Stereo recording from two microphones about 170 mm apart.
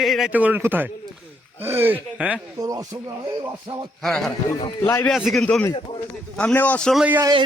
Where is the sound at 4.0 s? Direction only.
Centre (ahead or behind).